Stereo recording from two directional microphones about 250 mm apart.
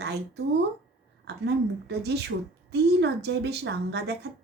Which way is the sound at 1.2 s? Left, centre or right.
Right.